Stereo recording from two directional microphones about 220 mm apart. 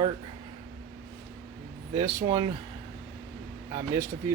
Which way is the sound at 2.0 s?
20° right (ahead or behind).